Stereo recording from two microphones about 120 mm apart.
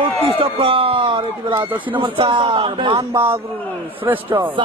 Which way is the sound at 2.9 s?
20° right (ahead or behind).